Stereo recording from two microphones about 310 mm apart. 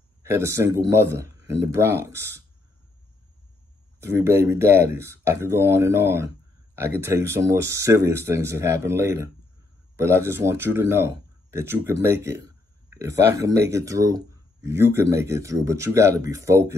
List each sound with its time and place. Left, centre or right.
0.2 s speech: centre
4.0 s speech: centre